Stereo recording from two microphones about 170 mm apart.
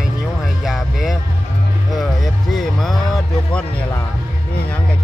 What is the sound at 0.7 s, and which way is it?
Music, centre (ahead or behind).